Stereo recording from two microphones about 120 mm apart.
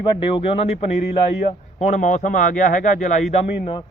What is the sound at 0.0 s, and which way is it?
Speech, 45° left (ahead or behind).